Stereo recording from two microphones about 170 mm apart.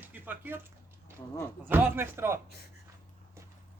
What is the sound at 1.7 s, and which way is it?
Speech, 10° right (ahead or behind).